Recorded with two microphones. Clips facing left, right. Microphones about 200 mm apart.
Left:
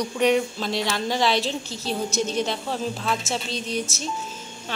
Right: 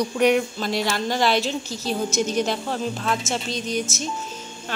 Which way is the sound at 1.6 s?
30° left (ahead or behind).